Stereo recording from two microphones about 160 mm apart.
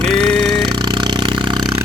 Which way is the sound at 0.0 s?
5° left (ahead or behind).